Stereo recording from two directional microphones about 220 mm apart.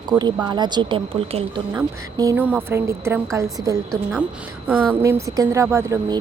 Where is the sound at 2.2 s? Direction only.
10° right (ahead or behind).